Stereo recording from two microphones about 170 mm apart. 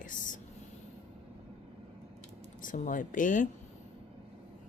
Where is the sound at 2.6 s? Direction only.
50° left (ahead or behind).